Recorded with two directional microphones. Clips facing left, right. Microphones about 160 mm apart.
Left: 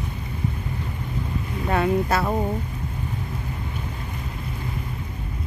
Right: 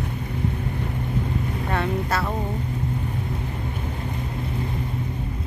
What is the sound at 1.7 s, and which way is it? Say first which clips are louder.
Speech: left 5 dB; 10° left (ahead or behind).